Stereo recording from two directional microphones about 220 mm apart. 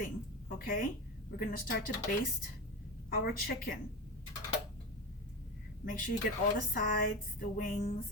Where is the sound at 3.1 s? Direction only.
45° left (ahead or behind).